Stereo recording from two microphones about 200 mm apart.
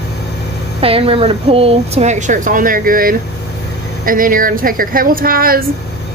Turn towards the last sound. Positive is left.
turn(degrees=-45)  # may be behind; listen again after turning